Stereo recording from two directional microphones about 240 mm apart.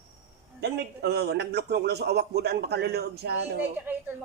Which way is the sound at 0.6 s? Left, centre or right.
Right.